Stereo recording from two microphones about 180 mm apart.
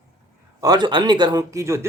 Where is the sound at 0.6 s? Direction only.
25° right (ahead or behind).